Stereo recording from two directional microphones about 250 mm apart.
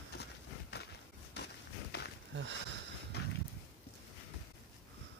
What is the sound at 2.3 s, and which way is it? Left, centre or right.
Sniff, right.